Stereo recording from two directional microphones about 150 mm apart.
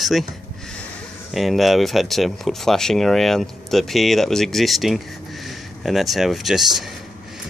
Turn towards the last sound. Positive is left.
turn(degrees=0)  # may be behind; listen again after turning